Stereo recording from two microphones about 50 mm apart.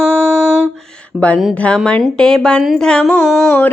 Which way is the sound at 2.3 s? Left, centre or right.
Centre.